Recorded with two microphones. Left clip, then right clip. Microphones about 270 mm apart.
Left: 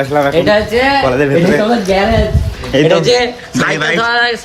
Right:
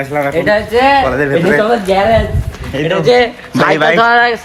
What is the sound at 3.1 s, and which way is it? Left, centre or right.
A man's voice, centre.